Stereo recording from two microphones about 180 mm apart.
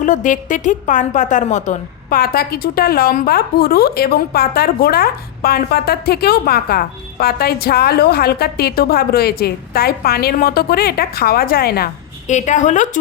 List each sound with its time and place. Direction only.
0.0 s a woman's voice: 45° left (ahead or behind)
12.3 s a woman's voice: 40° left (ahead or behind)